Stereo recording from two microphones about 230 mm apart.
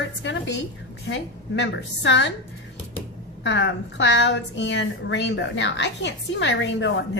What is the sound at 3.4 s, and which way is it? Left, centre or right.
A woman's voice, left.